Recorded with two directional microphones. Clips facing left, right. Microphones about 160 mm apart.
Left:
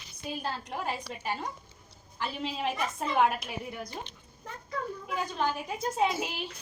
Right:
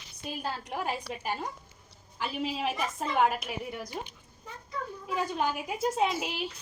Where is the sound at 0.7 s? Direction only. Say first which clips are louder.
Right 1 dB; 5° right (ahead or behind).